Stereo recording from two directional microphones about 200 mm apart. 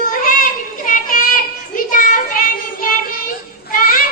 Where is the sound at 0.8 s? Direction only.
45° left (ahead or behind).